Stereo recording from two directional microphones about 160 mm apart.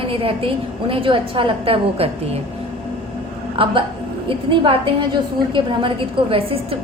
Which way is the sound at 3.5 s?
35° right (ahead or behind).